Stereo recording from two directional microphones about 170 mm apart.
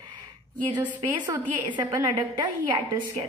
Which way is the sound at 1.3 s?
25° right (ahead or behind).